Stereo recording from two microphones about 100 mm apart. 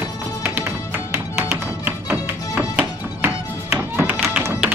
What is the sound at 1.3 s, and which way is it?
Music, 10° right (ahead or behind).